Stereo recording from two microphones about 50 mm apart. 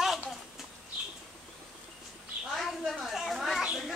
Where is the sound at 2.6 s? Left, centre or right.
Centre.